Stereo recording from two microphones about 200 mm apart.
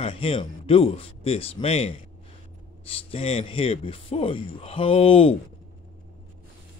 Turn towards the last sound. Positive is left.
turn(degrees=30)  # may be behind; listen again after turning